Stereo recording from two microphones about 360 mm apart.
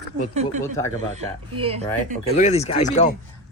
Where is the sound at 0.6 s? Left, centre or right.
Centre.